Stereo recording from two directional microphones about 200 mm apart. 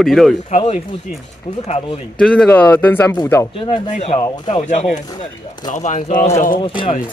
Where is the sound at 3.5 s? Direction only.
25° left (ahead or behind).